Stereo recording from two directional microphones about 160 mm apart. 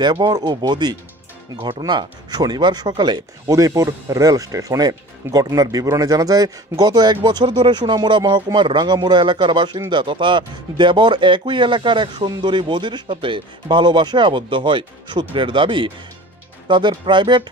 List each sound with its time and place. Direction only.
0.0 s speech: 25° right (ahead or behind)